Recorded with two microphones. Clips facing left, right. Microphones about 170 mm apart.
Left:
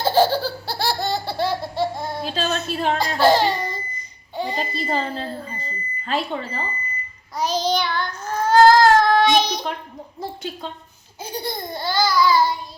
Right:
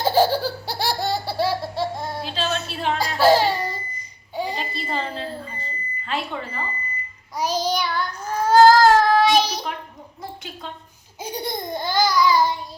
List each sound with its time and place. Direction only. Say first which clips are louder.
0.0 s laughter: left 1 dB; 10° right (ahead or behind)
2.2 s a sound: left 2 dB; 45° left (ahead or behind)
2.6 s speech: left 3 dB; 45° left (ahead or behind)
3.0 s a sound: right 1 dB; 5° right (ahead or behind)
4.5 s smoke detector: left 4 dB; 40° left (ahead or behind)
7.3 s child singing: left 1 dB; 10° right (ahead or behind)
11.2 s laughter: even; 20° right (ahead or behind)